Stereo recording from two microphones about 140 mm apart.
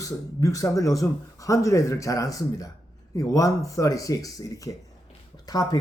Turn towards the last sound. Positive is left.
turn(degrees=25)  # may be behind; listen again after turning